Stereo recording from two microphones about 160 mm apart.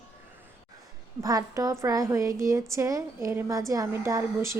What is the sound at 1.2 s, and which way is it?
A woman's voice, 20° right (ahead or behind).